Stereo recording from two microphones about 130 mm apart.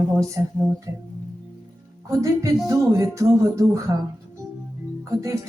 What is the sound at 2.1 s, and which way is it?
Speech, 25° right (ahead or behind).